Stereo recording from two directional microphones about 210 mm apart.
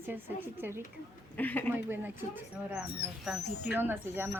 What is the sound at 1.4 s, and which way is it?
Speech, 10° left (ahead or behind).